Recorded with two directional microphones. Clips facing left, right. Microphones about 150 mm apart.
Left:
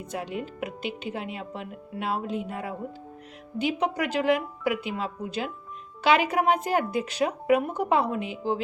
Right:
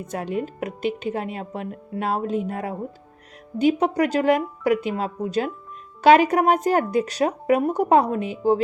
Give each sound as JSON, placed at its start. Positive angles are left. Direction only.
{"t": 0.1, "sound": "speech", "side_deg": -45}